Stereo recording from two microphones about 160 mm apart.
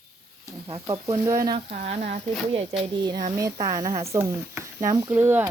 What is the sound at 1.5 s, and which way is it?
Speech, 45° right (ahead or behind).